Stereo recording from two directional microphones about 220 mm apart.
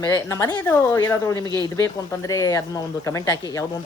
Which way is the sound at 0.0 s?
15° left (ahead or behind).